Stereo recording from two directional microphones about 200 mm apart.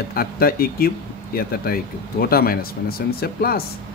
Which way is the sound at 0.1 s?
50° left (ahead or behind).